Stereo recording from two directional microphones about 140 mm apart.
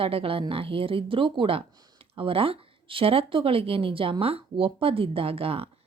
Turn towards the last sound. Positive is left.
turn(degrees=-45)  # may be behind; listen again after turning